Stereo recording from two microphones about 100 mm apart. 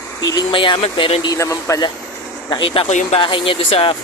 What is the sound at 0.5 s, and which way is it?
Speech, 55° left (ahead or behind).